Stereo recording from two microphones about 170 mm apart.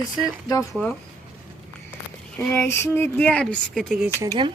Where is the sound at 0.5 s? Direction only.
20° left (ahead or behind).